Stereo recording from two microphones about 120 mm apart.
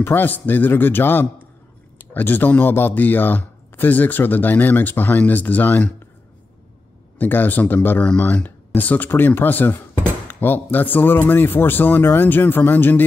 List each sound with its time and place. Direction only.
0.0 s speech: 15° left (ahead or behind)
7.2 s speech: 15° left (ahead or behind)